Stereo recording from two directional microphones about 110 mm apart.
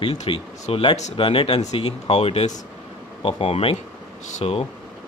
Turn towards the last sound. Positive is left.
turn(degrees=80)